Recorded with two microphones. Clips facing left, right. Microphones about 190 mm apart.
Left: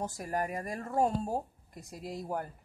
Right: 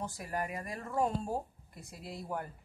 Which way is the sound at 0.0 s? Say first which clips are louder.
Left 4 dB; 40° left (ahead or behind).